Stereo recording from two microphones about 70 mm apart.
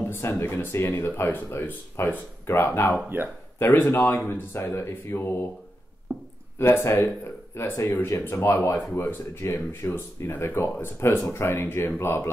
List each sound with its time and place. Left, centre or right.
0.1 s speech: left
6.6 s speech: left